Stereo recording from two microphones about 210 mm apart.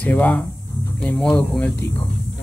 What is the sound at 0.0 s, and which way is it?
Speech, 5° left (ahead or behind).